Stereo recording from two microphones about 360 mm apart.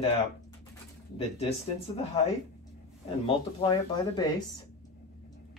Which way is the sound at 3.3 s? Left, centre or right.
Centre.